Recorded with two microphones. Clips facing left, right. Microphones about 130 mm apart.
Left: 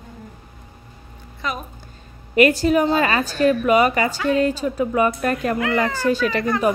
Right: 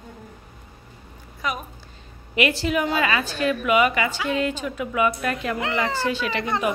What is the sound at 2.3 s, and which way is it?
Speech, 45° left (ahead or behind).